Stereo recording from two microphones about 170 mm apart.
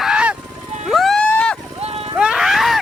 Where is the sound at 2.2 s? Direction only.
5° right (ahead or behind).